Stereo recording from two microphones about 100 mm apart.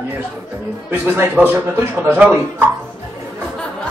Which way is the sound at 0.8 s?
20° right (ahead or behind).